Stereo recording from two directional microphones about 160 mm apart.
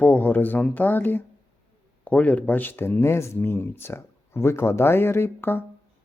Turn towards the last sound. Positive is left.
turn(degrees=15)  # may be behind; listen again after turning